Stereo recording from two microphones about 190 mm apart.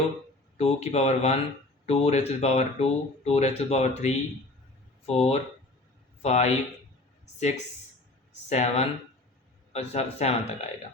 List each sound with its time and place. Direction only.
0.5 s speech: 35° left (ahead or behind)
8.3 s a sound: 35° left (ahead or behind)
9.7 s speech: 35° left (ahead or behind)